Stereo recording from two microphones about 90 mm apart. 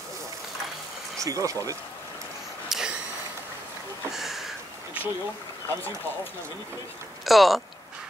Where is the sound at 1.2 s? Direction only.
40° right (ahead or behind).